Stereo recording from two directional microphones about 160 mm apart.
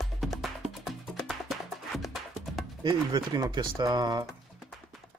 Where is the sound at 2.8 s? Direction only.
25° right (ahead or behind).